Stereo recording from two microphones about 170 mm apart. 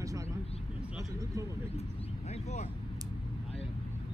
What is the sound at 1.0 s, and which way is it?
Speech, 20° right (ahead or behind).